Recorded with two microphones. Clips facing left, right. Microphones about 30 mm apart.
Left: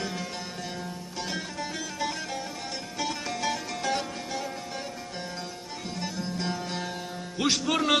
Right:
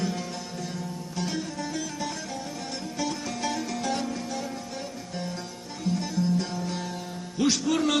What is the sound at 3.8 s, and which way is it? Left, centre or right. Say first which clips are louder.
Music: right 1 dB; left.